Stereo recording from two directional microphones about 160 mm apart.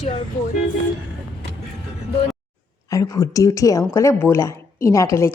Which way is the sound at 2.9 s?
20° left (ahead or behind).